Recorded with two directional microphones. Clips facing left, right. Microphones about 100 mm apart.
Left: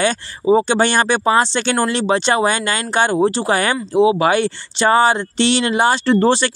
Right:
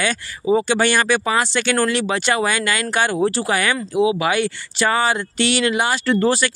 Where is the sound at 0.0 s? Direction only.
30° left (ahead or behind).